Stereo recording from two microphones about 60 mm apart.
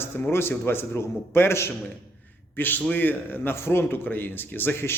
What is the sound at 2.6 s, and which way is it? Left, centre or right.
Speech, left.